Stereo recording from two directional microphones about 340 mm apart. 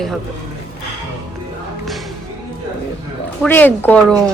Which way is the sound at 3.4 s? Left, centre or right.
Centre.